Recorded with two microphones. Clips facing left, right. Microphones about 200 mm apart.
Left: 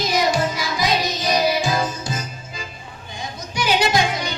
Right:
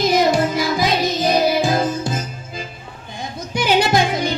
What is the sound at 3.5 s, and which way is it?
Music, 55° right (ahead or behind).